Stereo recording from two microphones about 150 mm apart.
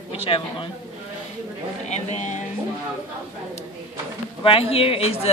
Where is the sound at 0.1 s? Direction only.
40° left (ahead or behind).